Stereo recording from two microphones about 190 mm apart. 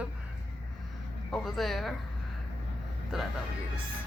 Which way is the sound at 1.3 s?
Centre (ahead or behind).